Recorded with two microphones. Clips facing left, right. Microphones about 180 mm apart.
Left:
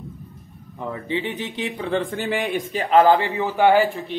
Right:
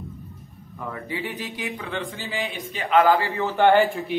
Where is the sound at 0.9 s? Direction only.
25° left (ahead or behind).